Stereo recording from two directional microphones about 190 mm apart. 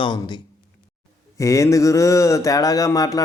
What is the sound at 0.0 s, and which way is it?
Speech, 25° left (ahead or behind).